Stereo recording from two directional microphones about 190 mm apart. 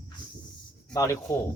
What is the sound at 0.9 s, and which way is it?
Speech, 15° left (ahead or behind).